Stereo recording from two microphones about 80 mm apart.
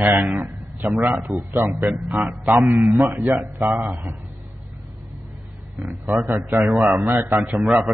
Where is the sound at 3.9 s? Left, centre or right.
Right.